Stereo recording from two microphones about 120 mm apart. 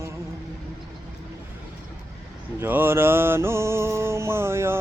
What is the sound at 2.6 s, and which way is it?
Mantra, 20° right (ahead or behind).